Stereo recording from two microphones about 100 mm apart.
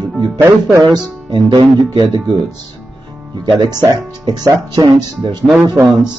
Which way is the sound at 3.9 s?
40° right (ahead or behind).